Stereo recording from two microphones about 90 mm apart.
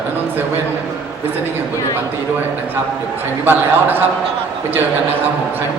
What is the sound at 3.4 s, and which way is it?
Speech, 20° right (ahead or behind).